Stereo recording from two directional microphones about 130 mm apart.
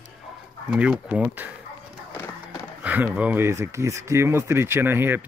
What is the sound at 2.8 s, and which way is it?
Speech, 10° right (ahead or behind).